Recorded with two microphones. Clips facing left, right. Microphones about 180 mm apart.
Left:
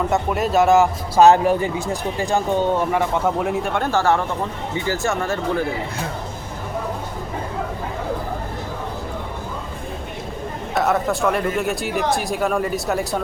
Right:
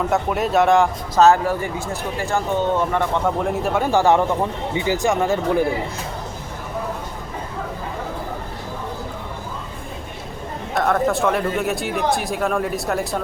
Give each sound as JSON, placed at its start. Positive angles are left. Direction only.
{"t": 0.1, "sound": "a man's voice", "side_deg": 0}
{"t": 10.8, "sound": "a man's voice", "side_deg": 0}